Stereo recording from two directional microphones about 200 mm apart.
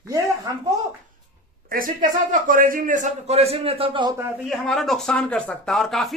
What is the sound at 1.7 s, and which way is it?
A man's voice, 45° right (ahead or behind).